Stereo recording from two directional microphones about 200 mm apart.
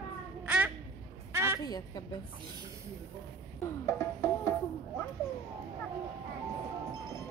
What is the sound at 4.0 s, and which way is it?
Music, 10° left (ahead or behind).